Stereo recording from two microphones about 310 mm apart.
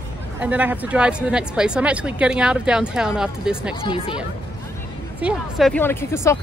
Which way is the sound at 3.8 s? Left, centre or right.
Centre.